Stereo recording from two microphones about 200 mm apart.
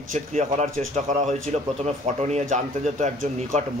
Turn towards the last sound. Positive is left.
turn(degrees=-40)  # may be behind; listen again after turning